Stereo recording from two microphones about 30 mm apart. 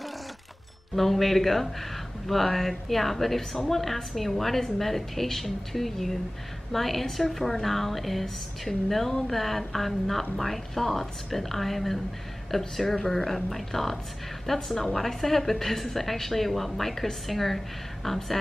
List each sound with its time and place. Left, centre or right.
0.9 s a woman's voice: centre